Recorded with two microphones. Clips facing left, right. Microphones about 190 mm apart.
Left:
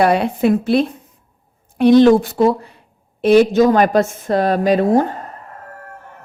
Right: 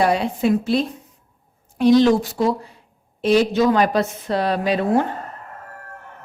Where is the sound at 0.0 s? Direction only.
60° left (ahead or behind); by 5.0 s 40° left (ahead or behind).